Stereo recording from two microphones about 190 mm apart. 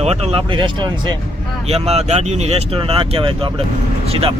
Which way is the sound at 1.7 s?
35° right (ahead or behind).